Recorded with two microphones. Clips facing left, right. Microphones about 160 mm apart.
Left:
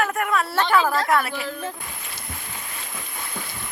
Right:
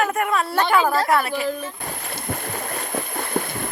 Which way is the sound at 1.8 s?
50° right (ahead or behind).